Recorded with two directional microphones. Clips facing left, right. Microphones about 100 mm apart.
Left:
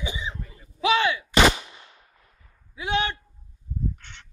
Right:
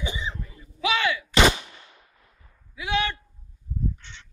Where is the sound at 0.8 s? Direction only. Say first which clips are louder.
Left 3 dB; 30° left (ahead or behind).